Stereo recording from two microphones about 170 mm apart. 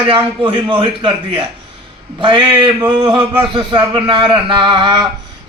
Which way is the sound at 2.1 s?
30° right (ahead or behind).